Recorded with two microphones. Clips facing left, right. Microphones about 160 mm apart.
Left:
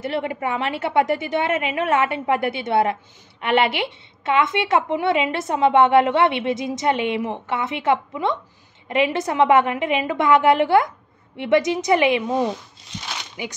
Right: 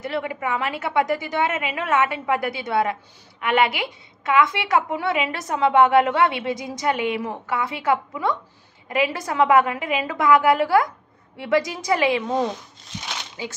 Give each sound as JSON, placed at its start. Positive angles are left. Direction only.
{"t": 0.0, "sound": "a woman's voice", "side_deg": 30}
{"t": 13.4, "sound": "a woman's voice", "side_deg": 20}